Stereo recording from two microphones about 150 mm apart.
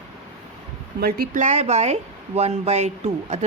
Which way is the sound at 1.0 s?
80° right.